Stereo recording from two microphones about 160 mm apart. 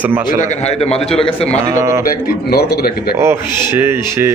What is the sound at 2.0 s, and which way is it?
Speech, 75° left (ahead or behind).